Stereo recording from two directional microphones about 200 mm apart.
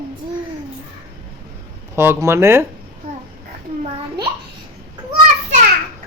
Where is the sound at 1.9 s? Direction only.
10° right (ahead or behind).